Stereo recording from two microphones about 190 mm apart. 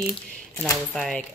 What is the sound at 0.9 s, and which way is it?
Speech, centre (ahead or behind).